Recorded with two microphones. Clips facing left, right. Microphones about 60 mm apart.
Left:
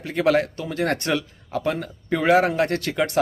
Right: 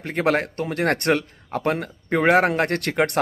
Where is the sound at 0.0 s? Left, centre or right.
Right.